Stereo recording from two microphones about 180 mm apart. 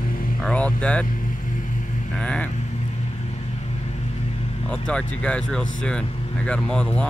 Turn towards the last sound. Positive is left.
turn(degrees=5)  # may be behind; listen again after turning